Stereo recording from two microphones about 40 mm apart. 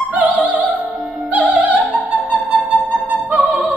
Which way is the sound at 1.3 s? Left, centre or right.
Right.